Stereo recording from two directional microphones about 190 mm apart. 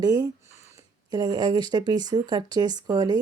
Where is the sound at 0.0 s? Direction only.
20° right (ahead or behind).